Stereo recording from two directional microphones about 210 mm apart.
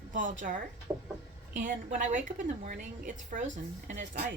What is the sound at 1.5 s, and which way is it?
A woman's voice, 35° right (ahead or behind).